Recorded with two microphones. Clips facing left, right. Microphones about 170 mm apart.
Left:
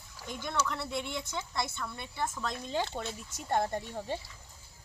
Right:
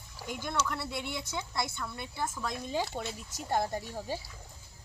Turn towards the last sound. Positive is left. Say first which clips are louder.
# left 1 dB
turn(degrees=-5)  # may be behind; listen again after turning